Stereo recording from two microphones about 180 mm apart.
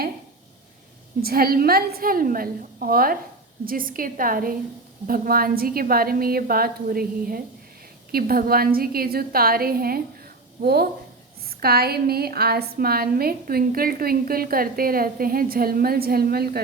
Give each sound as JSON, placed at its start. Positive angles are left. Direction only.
{"t": 1.2, "sound": "a woman's voice", "side_deg": -55}